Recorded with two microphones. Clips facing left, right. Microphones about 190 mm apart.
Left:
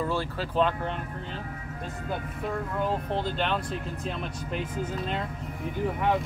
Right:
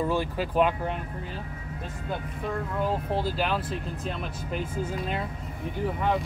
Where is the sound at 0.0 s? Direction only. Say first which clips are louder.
Right 3 dB; 15° right (ahead or behind).